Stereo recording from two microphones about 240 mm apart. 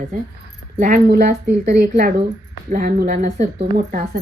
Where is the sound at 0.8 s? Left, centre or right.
Right.